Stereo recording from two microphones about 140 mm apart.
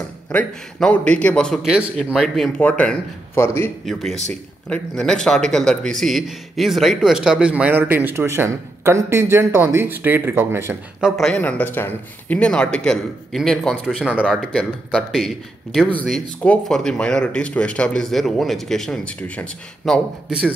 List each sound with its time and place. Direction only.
0.3 s a man's voice: 10° left (ahead or behind)
3.8 s a man's voice: centre (ahead or behind); by 10.8 s 15° right (ahead or behind)
11.0 s speech: centre (ahead or behind)
15.8 s a man's voice: 10° left (ahead or behind); by 20.5 s 5° right (ahead or behind)